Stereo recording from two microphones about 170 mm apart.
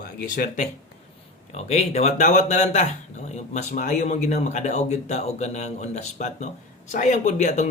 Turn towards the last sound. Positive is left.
turn(degrees=45)  # may be behind; listen again after turning